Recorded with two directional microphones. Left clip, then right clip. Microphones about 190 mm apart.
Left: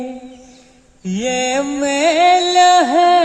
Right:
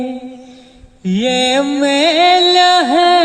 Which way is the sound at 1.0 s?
40° right (ahead or behind).